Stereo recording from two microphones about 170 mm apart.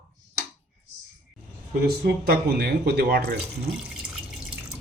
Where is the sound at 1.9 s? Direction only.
65° right (ahead or behind).